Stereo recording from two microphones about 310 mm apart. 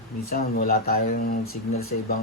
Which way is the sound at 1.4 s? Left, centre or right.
Left.